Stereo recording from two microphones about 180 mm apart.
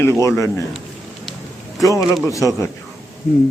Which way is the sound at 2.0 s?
Centre (ahead or behind).